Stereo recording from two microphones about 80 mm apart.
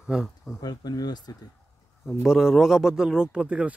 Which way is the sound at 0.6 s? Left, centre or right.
Left.